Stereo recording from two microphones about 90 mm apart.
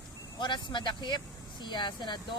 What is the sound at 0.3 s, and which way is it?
Speech, 60° left (ahead or behind).